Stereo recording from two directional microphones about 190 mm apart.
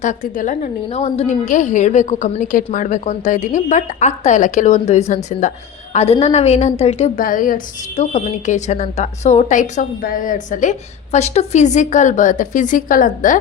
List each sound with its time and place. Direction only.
0.0 s a woman's voice: 40° left (ahead or behind)
7.2 s a woman's voice: 45° left (ahead or behind)